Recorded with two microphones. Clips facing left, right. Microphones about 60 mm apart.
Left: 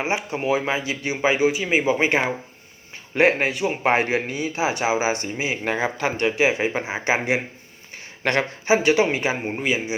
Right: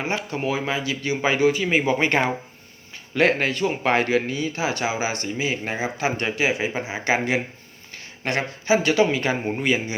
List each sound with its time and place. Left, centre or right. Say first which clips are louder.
0.0 s speech: left 1 dB; centre
1.5 s speech: even; centre
3.2 s speech: left 1 dB; left
5.6 s a man's voice: left 2 dB; left
6.2 s speech: left 6 dB; left
8.2 s speech: left 3 dB; left
8.6 s speech: even; left
9.6 s speech: right 1 dB; centre